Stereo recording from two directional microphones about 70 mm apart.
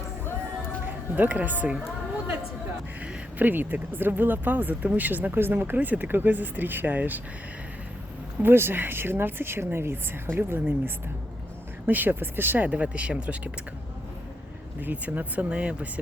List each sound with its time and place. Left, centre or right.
0.9 s speech: right
3.0 s speech: right
8.4 s speech: right; by 13.5 s centre
14.8 s speech: right